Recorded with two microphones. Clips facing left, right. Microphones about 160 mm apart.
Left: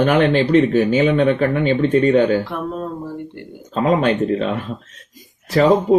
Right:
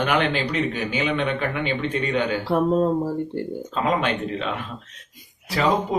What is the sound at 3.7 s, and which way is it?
Speech, 40° left (ahead or behind).